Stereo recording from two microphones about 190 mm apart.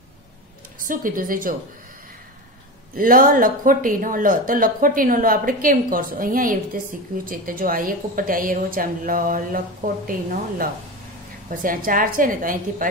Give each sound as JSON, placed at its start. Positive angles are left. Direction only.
{"t": 0.8, "sound": "speech", "side_deg": -45}
{"t": 3.0, "sound": "speech", "side_deg": -45}